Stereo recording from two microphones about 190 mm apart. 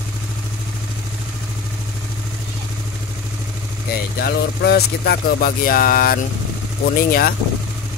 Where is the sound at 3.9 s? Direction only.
55° left (ahead or behind).